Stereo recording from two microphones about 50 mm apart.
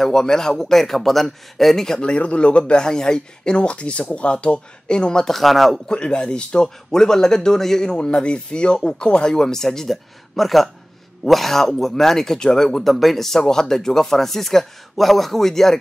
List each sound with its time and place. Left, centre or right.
0.0 s speech: centre
2.0 s speech: left; by 5.8 s centre
5.9 s speech: centre